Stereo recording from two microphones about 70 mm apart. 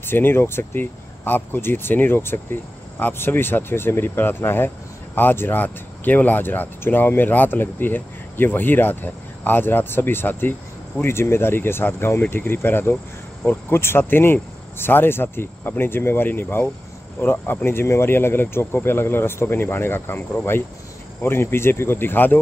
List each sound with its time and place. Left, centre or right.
0.0 s speech: left